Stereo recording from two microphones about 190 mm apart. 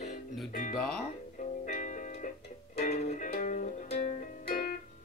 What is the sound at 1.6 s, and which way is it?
Music, 40° left (ahead or behind).